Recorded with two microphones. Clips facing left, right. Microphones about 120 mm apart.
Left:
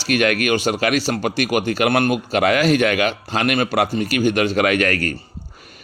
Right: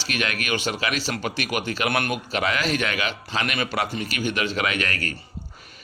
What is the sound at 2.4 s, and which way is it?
Speech, 50° left (ahead or behind).